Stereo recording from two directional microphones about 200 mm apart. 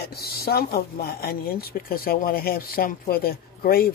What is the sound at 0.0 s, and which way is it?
Speech, 50° left (ahead or behind).